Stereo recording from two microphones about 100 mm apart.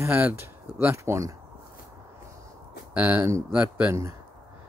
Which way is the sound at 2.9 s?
15° right (ahead or behind).